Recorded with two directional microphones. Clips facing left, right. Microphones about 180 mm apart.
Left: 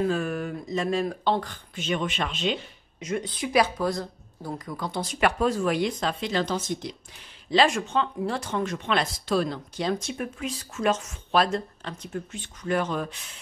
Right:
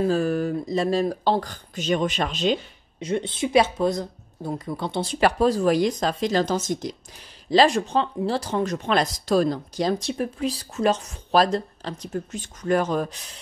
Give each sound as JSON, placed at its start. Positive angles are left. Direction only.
{"t": 0.0, "sound": "speech", "side_deg": -35}